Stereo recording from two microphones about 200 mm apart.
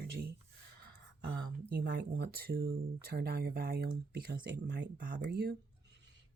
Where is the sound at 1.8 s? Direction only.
55° right (ahead or behind).